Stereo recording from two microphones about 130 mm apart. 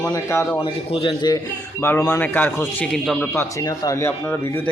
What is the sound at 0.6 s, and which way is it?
Speech, 45° left (ahead or behind).